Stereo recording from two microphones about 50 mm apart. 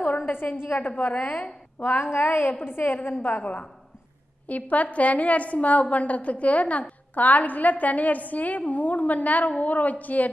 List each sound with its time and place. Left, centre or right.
0.0 s a sound: left
0.3 s a woman's voice: left
0.7 s a woman's voice: left
1.8 s a woman's voice: left
4.5 s a woman's voice: left